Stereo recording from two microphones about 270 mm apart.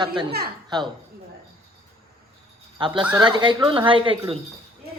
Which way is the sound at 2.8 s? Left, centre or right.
Centre.